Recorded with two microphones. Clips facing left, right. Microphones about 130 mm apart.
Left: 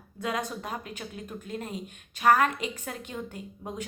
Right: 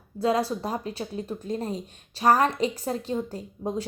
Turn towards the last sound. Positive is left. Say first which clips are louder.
# right 7 dB
turn(degrees=-35)  # may be behind; listen again after turning